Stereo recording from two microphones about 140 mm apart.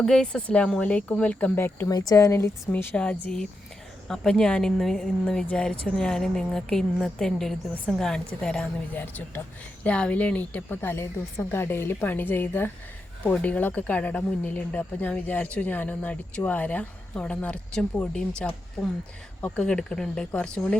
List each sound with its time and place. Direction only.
0.0 s speech: 5° left (ahead or behind)
1.9 s speech: 30° left (ahead or behind)
2.9 s speech: 10° left (ahead or behind)